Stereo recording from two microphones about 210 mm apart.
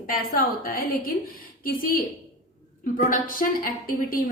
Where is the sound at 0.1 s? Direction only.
45° left (ahead or behind).